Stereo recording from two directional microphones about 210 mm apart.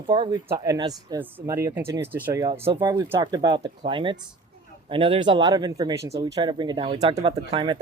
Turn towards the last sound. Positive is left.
turn(degrees=-20)  # may be behind; listen again after turning